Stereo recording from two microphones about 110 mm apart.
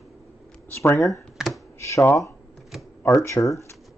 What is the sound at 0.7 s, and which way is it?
Speech, 20° left (ahead or behind).